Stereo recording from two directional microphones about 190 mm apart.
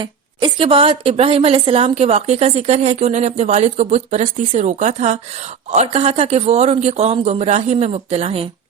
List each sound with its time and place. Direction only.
0.0 s a woman's voice: 25° right (ahead or behind)